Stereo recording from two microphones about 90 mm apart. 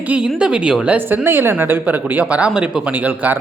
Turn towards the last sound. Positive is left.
turn(degrees=-20)  # may be behind; listen again after turning